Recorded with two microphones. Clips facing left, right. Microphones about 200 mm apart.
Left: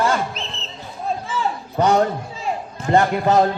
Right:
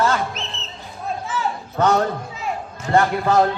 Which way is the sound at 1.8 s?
15° left (ahead or behind).